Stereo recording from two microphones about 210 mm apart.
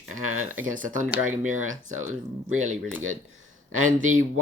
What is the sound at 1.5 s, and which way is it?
Speech, 35° right (ahead or behind).